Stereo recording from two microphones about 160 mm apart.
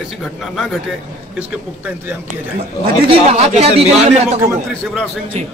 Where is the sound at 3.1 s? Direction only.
40° right (ahead or behind).